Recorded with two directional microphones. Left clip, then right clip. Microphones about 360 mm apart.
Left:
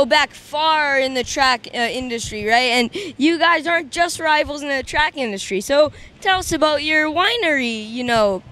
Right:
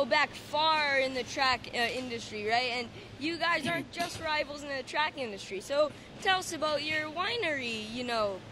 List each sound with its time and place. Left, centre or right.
0.0 s speech: left
0.6 s speech: left